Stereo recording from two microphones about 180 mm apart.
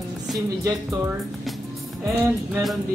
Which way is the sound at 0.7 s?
15° right (ahead or behind).